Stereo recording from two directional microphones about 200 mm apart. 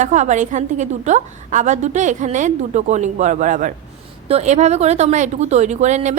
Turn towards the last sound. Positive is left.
turn(degrees=-35)  # may be behind; listen again after turning